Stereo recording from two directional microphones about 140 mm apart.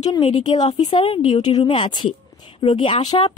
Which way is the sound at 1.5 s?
35° left (ahead or behind).